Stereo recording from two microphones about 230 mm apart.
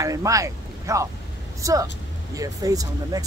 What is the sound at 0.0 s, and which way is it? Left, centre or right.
Speech, centre.